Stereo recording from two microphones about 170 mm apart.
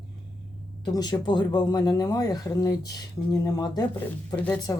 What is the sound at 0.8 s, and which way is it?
Speech, 25° left (ahead or behind).